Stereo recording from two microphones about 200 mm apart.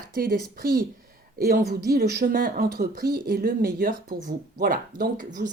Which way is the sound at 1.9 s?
50° right (ahead or behind).